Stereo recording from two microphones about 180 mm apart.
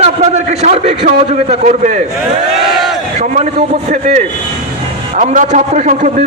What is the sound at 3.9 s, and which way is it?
Speech, 40° right (ahead or behind).